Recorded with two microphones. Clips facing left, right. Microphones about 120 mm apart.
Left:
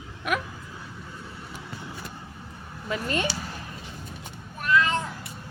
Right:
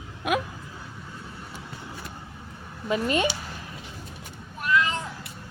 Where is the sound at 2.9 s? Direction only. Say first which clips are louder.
Right 4 dB; 20° right (ahead or behind).